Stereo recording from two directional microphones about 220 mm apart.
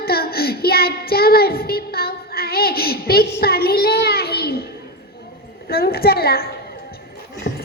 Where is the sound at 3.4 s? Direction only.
45° left (ahead or behind).